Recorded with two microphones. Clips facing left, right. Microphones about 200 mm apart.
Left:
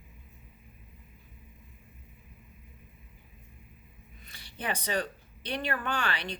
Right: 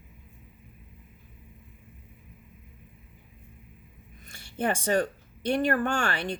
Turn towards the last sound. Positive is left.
turn(degrees=-50)  # may be behind; listen again after turning